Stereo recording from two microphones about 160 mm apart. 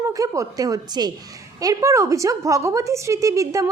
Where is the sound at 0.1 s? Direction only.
20° right (ahead or behind).